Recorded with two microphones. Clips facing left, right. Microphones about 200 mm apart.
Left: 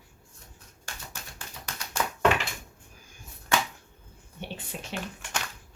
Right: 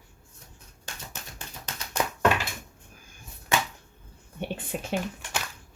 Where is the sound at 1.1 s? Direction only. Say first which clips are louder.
Right 2 dB; 20° right (ahead or behind).